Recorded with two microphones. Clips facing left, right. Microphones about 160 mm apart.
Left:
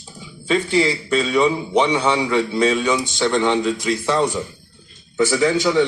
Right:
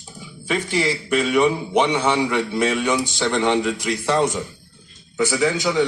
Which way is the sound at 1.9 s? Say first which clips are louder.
Left 1 dB; 10° left (ahead or behind).